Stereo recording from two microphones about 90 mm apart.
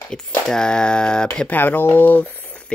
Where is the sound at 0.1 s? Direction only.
10° left (ahead or behind).